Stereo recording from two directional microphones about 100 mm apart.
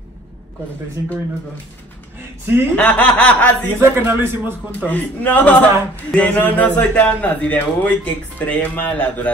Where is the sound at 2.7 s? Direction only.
15° left (ahead or behind).